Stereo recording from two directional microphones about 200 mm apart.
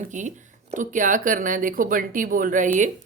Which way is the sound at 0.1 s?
40° right (ahead or behind).